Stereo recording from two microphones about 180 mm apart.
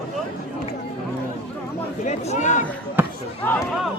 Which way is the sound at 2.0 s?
40° left (ahead or behind).